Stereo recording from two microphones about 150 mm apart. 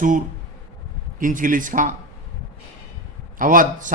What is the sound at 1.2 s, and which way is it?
Speech, 65° right (ahead or behind).